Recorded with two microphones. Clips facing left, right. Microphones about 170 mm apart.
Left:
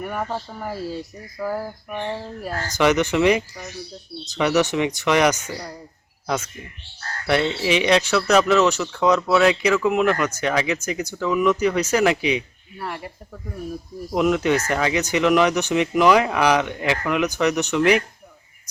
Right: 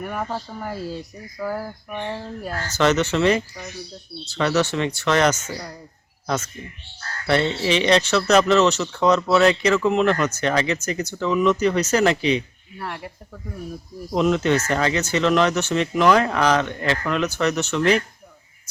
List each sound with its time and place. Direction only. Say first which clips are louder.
0.0 s speech: left 1 dB; centre (ahead or behind)
7.3 s speech: even; 10° left (ahead or behind)
14.1 s speech: even; 10° left (ahead or behind)